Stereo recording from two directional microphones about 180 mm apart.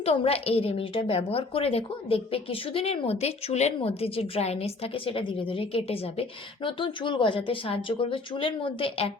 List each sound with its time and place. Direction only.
0.0 s a woman's voice: 30° left (ahead or behind)